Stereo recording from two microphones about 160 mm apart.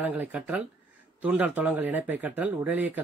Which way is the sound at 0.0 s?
10° right (ahead or behind).